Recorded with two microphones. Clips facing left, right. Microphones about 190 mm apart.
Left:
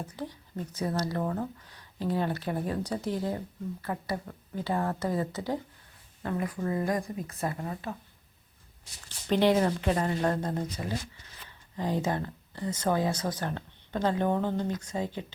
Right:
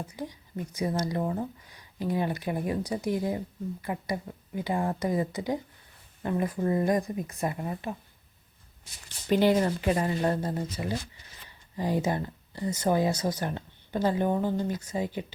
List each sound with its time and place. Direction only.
0.1 s speech: 10° right (ahead or behind)
9.3 s speech: centre (ahead or behind)